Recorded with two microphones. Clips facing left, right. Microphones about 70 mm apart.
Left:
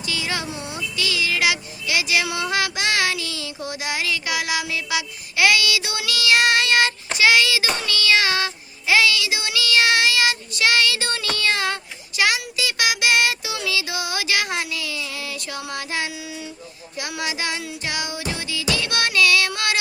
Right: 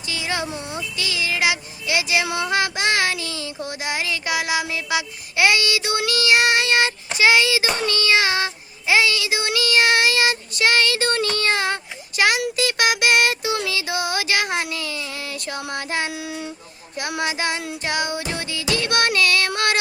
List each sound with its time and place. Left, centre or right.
0.0 s a sound: right
0.8 s child singing: right
11.3 s speech: right
12.5 s child singing: right
15.7 s music: right
16.1 s child singing: right
17.0 s child singing: right
17.8 s music: right